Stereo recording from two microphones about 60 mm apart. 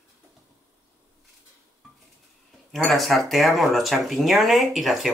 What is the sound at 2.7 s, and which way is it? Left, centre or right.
Speech, centre.